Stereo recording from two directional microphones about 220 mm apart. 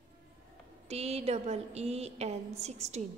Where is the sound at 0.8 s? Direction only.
30° right (ahead or behind).